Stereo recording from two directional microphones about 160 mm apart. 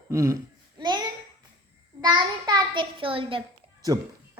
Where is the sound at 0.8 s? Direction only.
25° right (ahead or behind).